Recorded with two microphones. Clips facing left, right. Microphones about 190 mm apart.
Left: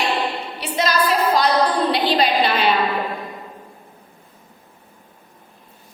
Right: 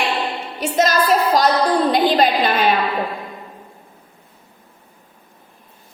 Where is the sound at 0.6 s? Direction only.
45° right (ahead or behind).